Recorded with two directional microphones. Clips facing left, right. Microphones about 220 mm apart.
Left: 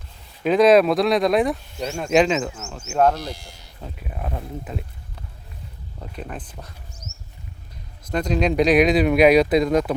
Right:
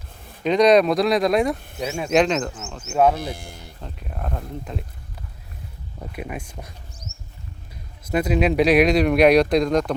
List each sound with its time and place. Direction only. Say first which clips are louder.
0.4 s speech: left 1 dB; 5° left (ahead or behind)
1.5 s speech: right 3 dB; 55° right (ahead or behind)
1.8 s speech: left 1 dB; 5° right (ahead or behind)
3.2 s speech: right 2 dB; 55° right (ahead or behind)
3.8 s speech: left 2 dB; 5° left (ahead or behind)
6.0 s speech: right 2 dB; 10° right (ahead or behind)
8.0 s speech: right 2 dB; 5° right (ahead or behind)